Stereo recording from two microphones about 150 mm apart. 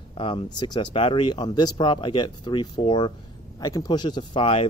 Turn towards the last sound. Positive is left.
turn(degrees=35)  # may be behind; listen again after turning